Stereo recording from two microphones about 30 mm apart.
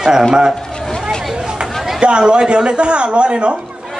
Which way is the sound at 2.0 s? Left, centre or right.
Right.